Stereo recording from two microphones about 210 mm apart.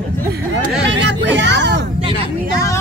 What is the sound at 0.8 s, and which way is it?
Speech, 60° right (ahead or behind).